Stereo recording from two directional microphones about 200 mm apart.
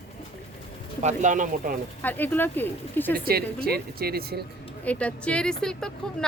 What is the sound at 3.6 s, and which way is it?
Speech, 50° right (ahead or behind).